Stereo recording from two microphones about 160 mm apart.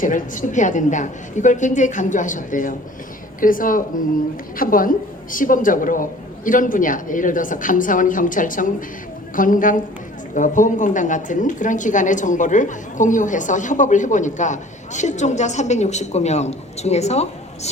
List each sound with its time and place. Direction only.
0.0 s a woman's voice: 55° left (ahead or behind)